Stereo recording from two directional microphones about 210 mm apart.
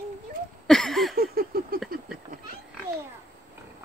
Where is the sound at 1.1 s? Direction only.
45° right (ahead or behind).